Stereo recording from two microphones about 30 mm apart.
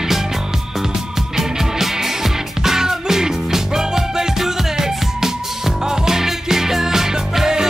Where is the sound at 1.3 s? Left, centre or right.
Centre.